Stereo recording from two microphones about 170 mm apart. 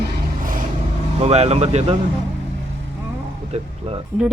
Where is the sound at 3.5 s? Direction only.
35° right (ahead or behind).